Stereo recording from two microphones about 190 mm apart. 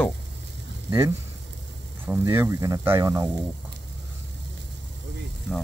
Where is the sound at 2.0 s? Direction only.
15° right (ahead or behind).